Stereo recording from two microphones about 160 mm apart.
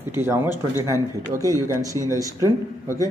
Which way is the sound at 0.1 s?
15° right (ahead or behind).